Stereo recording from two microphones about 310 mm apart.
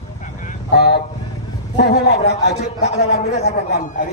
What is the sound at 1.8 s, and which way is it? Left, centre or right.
Speech, left.